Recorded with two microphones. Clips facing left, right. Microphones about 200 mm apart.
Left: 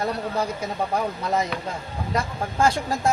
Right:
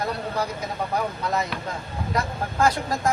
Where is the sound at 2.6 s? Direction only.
30° left (ahead or behind).